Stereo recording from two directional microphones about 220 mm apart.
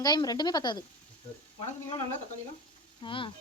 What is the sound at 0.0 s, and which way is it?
Speech, 15° left (ahead or behind).